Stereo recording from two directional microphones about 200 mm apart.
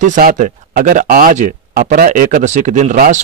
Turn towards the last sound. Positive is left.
turn(degrees=-40)  # may be behind; listen again after turning